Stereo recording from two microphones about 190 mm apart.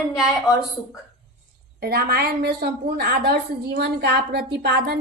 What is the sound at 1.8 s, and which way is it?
A woman's voice, 55° right (ahead or behind).